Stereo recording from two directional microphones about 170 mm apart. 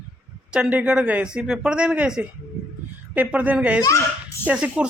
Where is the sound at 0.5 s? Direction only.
5° right (ahead or behind).